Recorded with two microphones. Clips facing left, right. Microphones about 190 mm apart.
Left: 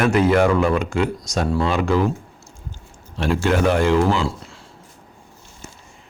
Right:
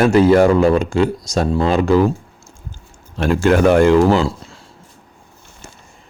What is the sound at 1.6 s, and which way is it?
Speech, 35° right (ahead or behind).